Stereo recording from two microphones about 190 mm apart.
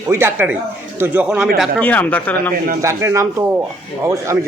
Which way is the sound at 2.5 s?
50° right (ahead or behind).